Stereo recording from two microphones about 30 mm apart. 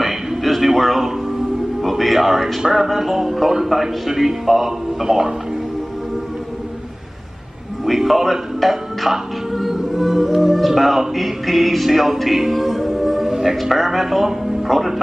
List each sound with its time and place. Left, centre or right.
0.6 s a sound: centre
1.8 s a man's voice: centre
7.8 s speech: centre
9.9 s music: centre
13.6 s speech: centre